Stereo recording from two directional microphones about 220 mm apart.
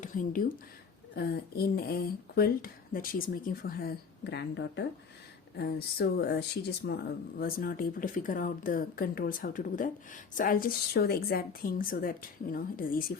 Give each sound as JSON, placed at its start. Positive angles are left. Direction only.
{"t": 0.0, "sound": "speech", "side_deg": 35}